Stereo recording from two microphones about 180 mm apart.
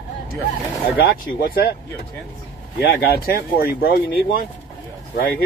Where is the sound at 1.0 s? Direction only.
60° left (ahead or behind).